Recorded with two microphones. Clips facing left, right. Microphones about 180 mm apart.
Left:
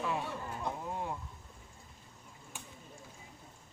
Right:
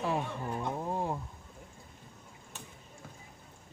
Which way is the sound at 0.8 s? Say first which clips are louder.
Right 5 dB; 35° right (ahead or behind).